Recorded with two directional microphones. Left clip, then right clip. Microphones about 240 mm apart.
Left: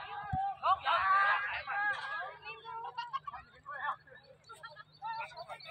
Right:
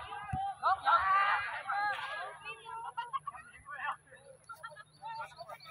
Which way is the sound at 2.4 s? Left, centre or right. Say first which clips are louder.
Even; left.